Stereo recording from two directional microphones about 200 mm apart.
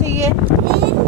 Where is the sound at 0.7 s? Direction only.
55° right (ahead or behind).